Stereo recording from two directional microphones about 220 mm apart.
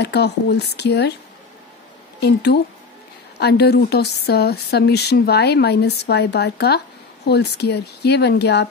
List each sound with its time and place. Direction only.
0.0 s speech: 50° left (ahead or behind)
2.1 s speech: 50° left (ahead or behind)